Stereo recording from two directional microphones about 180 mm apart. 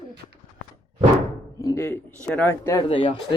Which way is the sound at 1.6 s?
15° left (ahead or behind).